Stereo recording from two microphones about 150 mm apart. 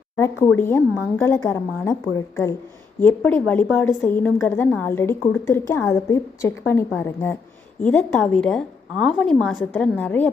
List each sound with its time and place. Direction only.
0.2 s a woman's voice: 15° left (ahead or behind)